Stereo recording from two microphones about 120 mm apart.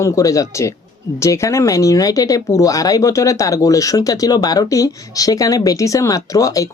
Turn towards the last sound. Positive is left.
turn(degrees=30)  # may be behind; listen again after turning